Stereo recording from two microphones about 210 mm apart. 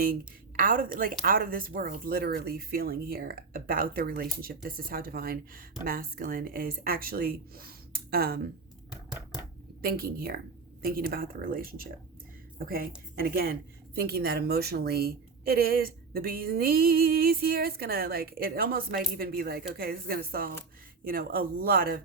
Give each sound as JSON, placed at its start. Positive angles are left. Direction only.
{"t": 0.6, "sound": "speech", "side_deg": -40}
{"t": 9.8, "sound": "speech", "side_deg": -45}